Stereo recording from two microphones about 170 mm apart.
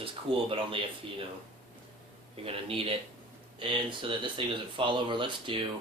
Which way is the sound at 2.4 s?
35° right (ahead or behind).